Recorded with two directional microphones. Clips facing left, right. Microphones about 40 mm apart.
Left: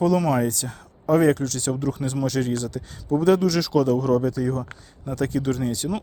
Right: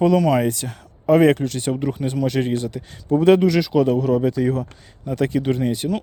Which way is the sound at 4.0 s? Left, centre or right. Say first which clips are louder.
Right 2 dB; centre.